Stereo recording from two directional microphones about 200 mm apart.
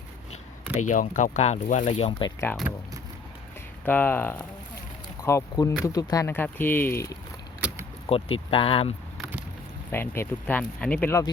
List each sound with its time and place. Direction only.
0.9 s speech: 40° left (ahead or behind)
3.8 s speech: 10° left (ahead or behind)
7.6 s a sound: 5° right (ahead or behind)
8.1 s speech: 25° left (ahead or behind)
9.9 s speech: 10° left (ahead or behind)